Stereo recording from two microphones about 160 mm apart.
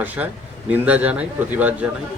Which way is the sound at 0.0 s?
10° right (ahead or behind).